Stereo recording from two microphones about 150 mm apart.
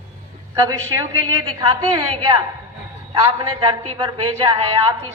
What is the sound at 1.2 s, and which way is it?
A man's voice, 25° right (ahead or behind).